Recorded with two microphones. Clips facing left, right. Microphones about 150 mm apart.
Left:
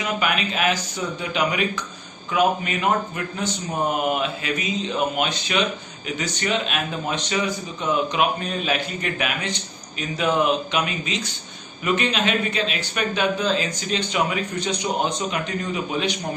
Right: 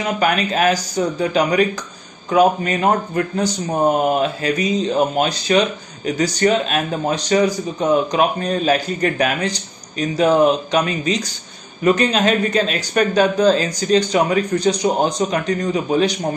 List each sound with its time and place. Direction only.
0.0 s speech: 40° right (ahead or behind)